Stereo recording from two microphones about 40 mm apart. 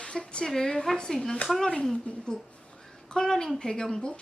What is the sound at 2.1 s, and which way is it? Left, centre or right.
Speech, left.